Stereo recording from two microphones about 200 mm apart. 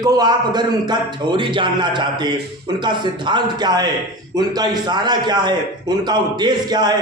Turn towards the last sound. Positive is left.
turn(degrees=-20)  # may be behind; listen again after turning